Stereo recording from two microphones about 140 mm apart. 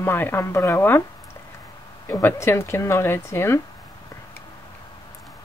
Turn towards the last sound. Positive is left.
turn(degrees=20)  # may be behind; listen again after turning